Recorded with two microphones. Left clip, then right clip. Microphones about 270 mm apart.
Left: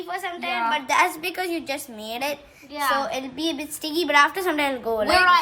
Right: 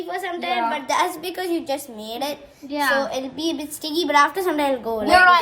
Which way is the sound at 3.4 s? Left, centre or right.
Centre.